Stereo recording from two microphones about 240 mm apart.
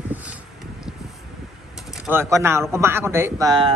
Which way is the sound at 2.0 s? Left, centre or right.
Centre.